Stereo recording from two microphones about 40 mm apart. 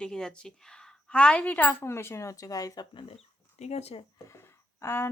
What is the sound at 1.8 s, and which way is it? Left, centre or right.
Speech, left.